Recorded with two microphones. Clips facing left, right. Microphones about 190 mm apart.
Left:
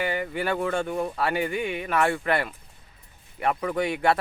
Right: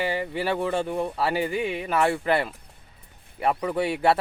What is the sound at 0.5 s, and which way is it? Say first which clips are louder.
Speech: right 1 dB; 5° right (ahead or behind).